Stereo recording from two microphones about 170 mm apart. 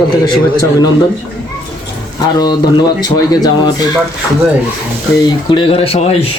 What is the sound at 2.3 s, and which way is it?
Speech, 25° left (ahead or behind).